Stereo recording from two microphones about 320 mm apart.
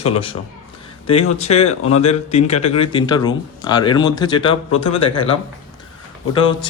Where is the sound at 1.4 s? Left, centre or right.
Centre.